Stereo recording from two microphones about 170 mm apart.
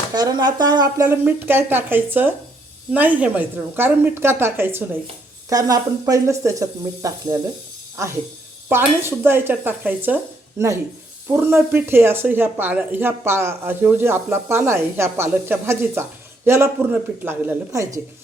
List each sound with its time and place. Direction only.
0.1 s speech: 25° right (ahead or behind)
1.0 s speech: 10° right (ahead or behind)
8.7 s speech: 15° right (ahead or behind)
11.3 s speech: 15° right (ahead or behind)